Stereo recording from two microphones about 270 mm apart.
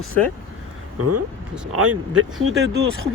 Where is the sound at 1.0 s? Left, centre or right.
Right.